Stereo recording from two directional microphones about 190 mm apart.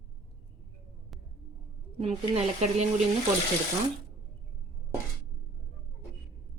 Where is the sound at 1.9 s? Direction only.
30° right (ahead or behind).